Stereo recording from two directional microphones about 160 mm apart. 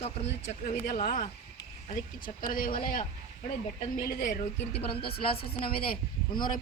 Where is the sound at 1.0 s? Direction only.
55° left (ahead or behind).